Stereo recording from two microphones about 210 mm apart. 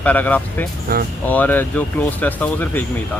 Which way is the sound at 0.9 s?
45° right (ahead or behind).